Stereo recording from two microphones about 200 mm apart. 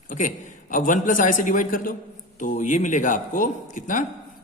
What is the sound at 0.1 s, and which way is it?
A man's voice, 40° left (ahead or behind).